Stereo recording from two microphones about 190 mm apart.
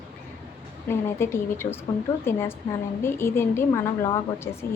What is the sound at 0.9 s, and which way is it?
A woman's voice, 15° left (ahead or behind).